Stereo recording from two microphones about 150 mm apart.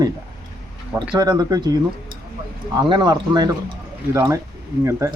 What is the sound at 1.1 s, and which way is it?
Speech, 25° right (ahead or behind).